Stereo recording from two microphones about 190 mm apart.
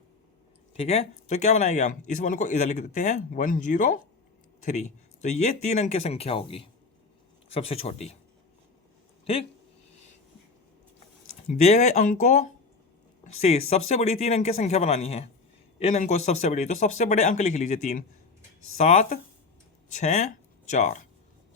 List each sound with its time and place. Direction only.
0.8 s speech: 30° left (ahead or behind)
9.2 s speech: 30° left (ahead or behind)
11.4 s speech: 35° left (ahead or behind)